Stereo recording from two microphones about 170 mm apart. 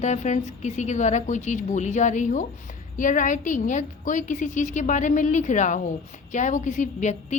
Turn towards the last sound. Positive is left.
turn(degrees=45)  # may be behind; listen again after turning